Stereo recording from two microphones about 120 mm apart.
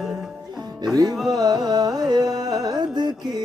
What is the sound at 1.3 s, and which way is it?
Music, 35° right (ahead or behind).